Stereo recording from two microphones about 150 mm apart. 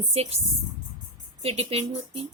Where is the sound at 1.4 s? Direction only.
40° right (ahead or behind).